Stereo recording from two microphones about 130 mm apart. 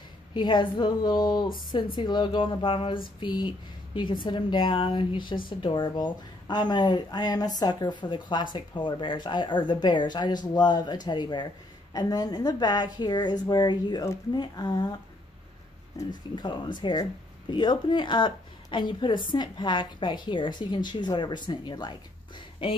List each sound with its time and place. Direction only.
0.3 s speech: 35° left (ahead or behind)
16.0 s speech: 35° left (ahead or behind)